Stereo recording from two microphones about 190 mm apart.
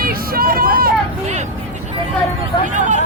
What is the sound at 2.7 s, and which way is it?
Speech, 40° right (ahead or behind).